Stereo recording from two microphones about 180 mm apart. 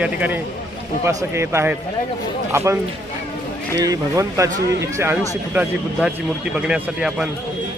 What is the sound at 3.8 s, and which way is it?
A man's voice, 20° right (ahead or behind).